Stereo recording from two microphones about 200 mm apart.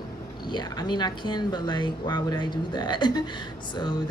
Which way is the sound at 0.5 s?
20° left (ahead or behind).